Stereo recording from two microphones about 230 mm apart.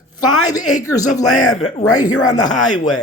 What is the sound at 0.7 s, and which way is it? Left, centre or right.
Speech, centre.